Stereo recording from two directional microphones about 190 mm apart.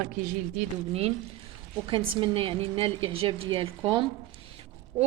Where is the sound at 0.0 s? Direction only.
45° right (ahead or behind).